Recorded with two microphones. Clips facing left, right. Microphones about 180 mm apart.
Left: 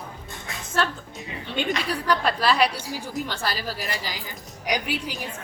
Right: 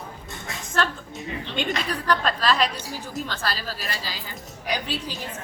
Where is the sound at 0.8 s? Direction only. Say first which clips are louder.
Even; 5° left (ahead or behind).